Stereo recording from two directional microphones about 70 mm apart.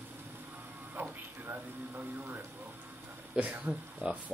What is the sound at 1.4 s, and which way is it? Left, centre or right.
Speech, right.